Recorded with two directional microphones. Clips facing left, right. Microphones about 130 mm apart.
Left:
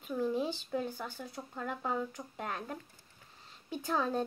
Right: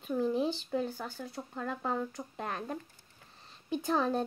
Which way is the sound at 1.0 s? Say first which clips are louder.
Right 2 dB; 10° left (ahead or behind).